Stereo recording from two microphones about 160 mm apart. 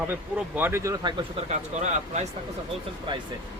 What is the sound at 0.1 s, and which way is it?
Speech, 15° right (ahead or behind).